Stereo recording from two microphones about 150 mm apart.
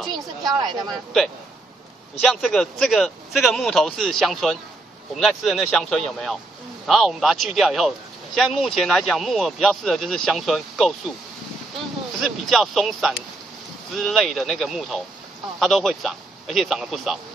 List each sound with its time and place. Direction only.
0.0 s a sound: centre (ahead or behind)
0.5 s speech: 25° right (ahead or behind)
2.2 s speech: 5° left (ahead or behind)
12.2 s speech: centre (ahead or behind)